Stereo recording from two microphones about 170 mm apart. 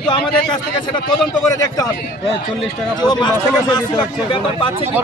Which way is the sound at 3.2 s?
25° left (ahead or behind).